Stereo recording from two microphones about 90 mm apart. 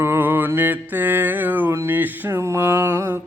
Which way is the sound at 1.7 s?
30° right (ahead or behind).